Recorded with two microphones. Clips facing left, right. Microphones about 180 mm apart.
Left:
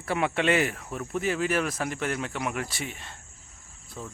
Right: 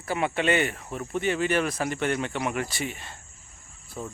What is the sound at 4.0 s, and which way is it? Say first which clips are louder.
Insect: right 4 dB; 15° right (ahead or behind).